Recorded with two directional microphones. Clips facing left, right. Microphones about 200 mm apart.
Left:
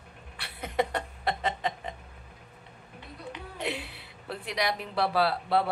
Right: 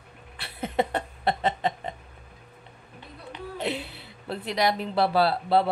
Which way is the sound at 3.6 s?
25° right (ahead or behind).